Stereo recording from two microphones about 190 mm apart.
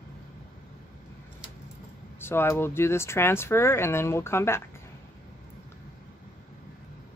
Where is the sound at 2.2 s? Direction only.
10° left (ahead or behind).